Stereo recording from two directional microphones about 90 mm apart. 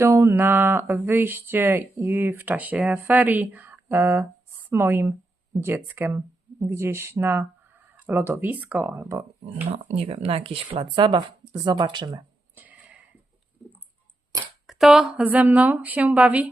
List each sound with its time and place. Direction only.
0.0 s speech: 30° right (ahead or behind)
9.7 s speech: 90° right; by 12.0 s 55° right (ahead or behind)
12.5 s a sound: 15° right (ahead or behind)
14.7 s speech: centre (ahead or behind)
15.2 s a woman's voice: 15° right (ahead or behind)